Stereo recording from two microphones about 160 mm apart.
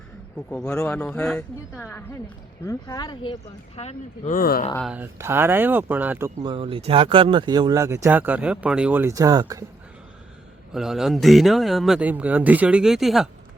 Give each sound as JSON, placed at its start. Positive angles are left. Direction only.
{"t": 0.6, "sound": "a woman's voice", "side_deg": 15}
{"t": 2.6, "sound": "speech", "side_deg": 25}
{"t": 3.8, "sound": "speech", "side_deg": 45}
{"t": 4.4, "sound": "speech", "side_deg": 70}
{"t": 4.9, "sound": "speech", "side_deg": -15}
{"t": 6.4, "sound": "speech", "side_deg": -30}
{"t": 10.8, "sound": "speech", "side_deg": 0}